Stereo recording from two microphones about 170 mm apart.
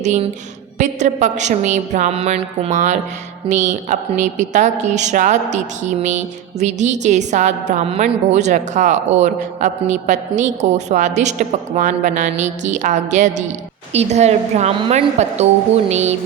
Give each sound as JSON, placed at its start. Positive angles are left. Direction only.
{"t": 0.0, "sound": "a woman's voice", "side_deg": -45}